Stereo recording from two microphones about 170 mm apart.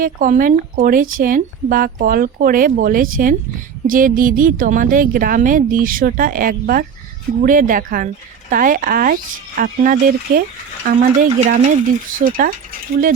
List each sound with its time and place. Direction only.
0.0 s a woman's voice: 55° right (ahead or behind)
11.3 s a woman's voice: 45° right (ahead or behind)